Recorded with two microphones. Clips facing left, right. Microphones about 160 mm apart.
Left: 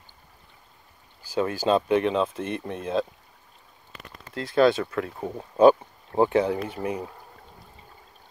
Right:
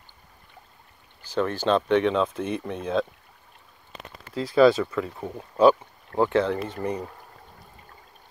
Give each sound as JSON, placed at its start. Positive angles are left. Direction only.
{"t": 1.2, "sound": "speech", "side_deg": 10}
{"t": 4.3, "sound": "speech", "side_deg": 0}
{"t": 5.7, "sound": "speech", "side_deg": 20}